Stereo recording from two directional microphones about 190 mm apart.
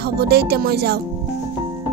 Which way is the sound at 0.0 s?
60° right (ahead or behind).